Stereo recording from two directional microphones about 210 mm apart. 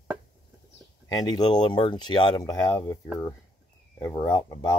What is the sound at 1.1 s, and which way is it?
Speech, 20° left (ahead or behind).